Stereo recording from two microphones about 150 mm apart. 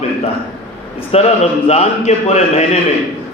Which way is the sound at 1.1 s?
40° left (ahead or behind).